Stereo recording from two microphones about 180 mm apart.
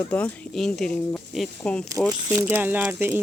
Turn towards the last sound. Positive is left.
turn(degrees=-10)  # may be behind; listen again after turning